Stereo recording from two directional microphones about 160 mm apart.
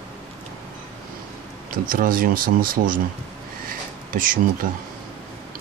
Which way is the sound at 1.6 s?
60° right (ahead or behind).